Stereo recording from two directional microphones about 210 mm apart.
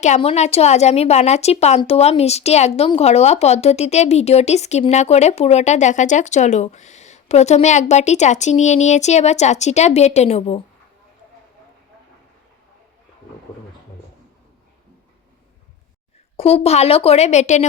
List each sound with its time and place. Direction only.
0.0 s a woman's voice: 30° left (ahead or behind)
16.4 s a woman's voice: 30° left (ahead or behind)